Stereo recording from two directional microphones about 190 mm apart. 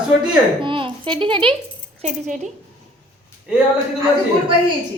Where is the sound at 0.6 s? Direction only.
25° right (ahead or behind).